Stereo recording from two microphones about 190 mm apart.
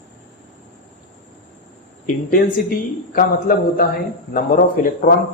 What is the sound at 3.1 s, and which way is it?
Speech, 45° left (ahead or behind).